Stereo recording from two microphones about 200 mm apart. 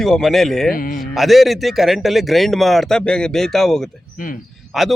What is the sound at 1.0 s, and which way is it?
Speech, centre (ahead or behind).